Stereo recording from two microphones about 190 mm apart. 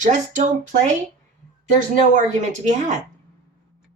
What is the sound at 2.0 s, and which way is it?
Speech, 40° right (ahead or behind).